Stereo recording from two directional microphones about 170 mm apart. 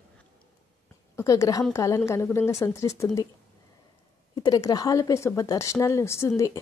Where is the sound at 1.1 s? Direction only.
20° left (ahead or behind).